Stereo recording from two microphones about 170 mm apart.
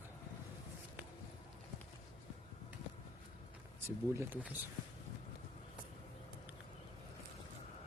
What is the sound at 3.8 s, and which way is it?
Speech, 15° right (ahead or behind).